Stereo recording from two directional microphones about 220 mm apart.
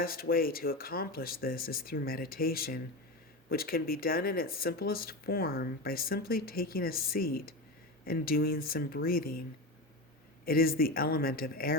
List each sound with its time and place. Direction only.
0.0 s speech: 40° left (ahead or behind)
10.4 s speech: 40° left (ahead or behind)